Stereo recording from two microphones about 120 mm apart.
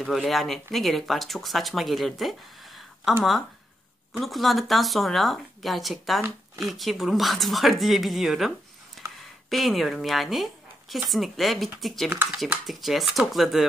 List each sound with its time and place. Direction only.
0.0 s speech: centre (ahead or behind)
4.2 s speech: centre (ahead or behind)
9.0 s a sound: centre (ahead or behind)
9.5 s speech: centre (ahead or behind)
12.1 s speech: 10° right (ahead or behind)